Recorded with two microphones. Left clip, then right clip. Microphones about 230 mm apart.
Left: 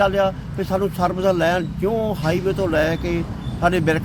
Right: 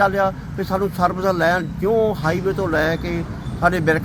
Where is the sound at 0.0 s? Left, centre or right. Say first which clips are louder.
Even; centre.